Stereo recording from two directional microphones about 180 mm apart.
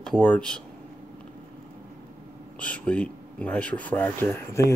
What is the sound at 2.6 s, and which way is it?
Speech, 5° left (ahead or behind).